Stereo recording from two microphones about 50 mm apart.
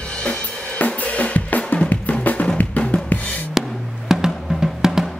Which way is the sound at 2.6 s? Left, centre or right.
Left.